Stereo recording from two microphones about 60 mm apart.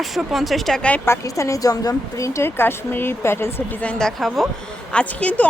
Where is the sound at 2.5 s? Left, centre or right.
Left.